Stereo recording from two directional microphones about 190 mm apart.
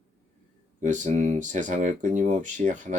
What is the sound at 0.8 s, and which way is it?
Speech, 40° right (ahead or behind).